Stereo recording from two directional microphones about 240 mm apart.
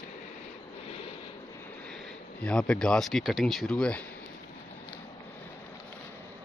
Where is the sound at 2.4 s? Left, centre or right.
Centre.